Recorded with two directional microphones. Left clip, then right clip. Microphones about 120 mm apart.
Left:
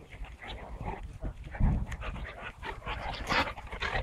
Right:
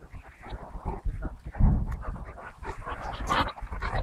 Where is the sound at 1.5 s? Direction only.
25° left (ahead or behind).